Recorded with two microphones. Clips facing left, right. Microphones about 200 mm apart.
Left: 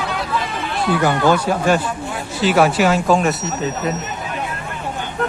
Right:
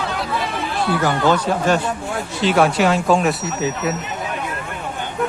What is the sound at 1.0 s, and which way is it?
Speech, 15° left (ahead or behind).